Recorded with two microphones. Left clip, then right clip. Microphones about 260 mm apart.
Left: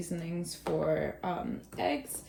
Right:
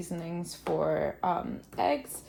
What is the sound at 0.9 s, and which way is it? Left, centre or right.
A woman's voice, right.